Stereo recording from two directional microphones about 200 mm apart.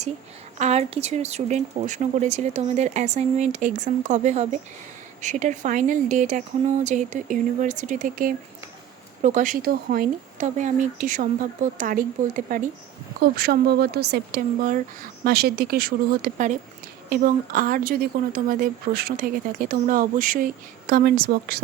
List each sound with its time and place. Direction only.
0.6 s speech: 30° right (ahead or behind); by 21.6 s 50° right (ahead or behind)